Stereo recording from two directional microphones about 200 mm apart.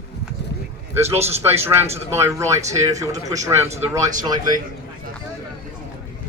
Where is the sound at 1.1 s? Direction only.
30° right (ahead or behind).